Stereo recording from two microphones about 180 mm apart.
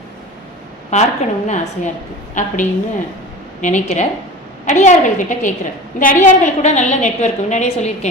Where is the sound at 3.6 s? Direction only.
45° left (ahead or behind).